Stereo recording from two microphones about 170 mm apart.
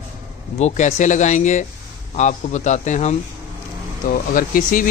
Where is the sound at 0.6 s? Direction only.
40° left (ahead or behind).